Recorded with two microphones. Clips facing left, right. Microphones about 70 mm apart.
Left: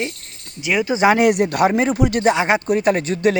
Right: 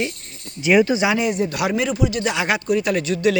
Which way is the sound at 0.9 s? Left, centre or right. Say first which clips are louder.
Left 5 dB; left.